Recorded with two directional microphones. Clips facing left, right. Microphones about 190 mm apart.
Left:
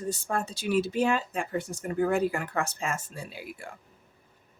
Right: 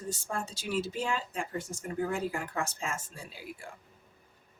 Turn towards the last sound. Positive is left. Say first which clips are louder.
# left 4 dB
turn(degrees=65)  # may be behind; listen again after turning